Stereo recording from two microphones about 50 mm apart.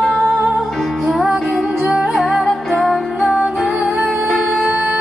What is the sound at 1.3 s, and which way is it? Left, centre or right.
Music, centre.